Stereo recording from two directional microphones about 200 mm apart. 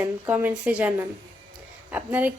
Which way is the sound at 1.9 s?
10° right (ahead or behind).